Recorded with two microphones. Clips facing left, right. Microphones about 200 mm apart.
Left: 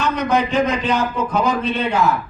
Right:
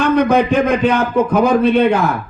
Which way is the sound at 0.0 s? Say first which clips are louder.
Right 6 dB; 55° right (ahead or behind).